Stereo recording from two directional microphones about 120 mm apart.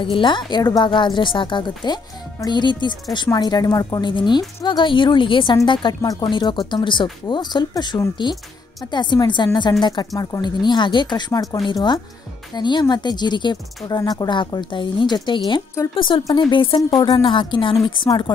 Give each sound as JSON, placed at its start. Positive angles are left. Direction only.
{"t": 0.0, "sound": "a woman's voice", "side_deg": 45}